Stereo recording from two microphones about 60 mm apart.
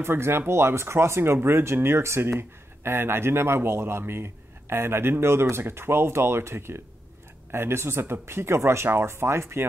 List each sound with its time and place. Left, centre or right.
0.0 s a man's voice: right